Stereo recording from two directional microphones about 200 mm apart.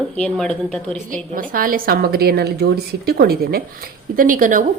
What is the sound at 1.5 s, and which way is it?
A woman's voice, 45° right (ahead or behind).